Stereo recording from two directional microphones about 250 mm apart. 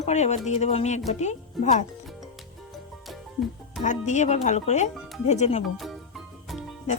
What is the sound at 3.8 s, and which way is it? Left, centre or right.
Speech, left.